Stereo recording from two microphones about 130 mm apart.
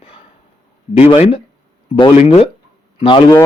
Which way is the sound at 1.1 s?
45° left (ahead or behind).